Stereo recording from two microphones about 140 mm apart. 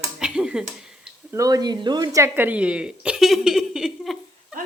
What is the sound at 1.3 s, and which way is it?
Speech, 25° right (ahead or behind).